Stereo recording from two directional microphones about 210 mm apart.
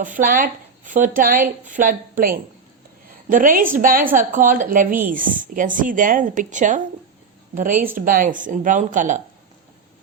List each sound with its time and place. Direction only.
0.0 s a woman's voice: 40° right (ahead or behind)